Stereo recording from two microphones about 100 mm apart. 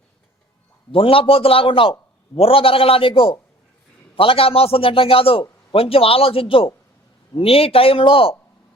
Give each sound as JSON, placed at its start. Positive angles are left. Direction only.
{"t": 0.9, "sound": "a man's voice", "side_deg": 65}